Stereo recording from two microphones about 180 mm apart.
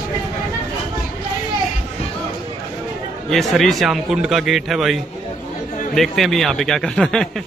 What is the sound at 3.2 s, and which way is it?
A man's voice, centre (ahead or behind).